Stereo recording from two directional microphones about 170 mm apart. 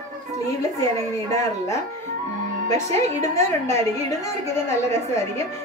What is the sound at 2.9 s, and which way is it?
A woman's voice, 15° left (ahead or behind).